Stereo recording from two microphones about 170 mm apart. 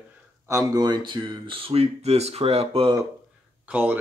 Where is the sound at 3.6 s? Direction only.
10° right (ahead or behind).